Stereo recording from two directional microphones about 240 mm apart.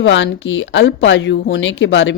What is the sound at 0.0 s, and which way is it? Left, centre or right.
Speech, left.